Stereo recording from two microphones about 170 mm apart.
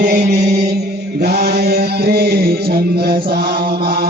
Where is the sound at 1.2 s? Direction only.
70° right (ahead or behind).